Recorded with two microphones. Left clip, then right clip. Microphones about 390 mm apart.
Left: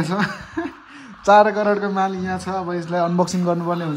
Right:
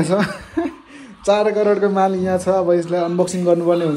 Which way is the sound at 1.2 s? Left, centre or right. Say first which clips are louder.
Left 2 dB; centre.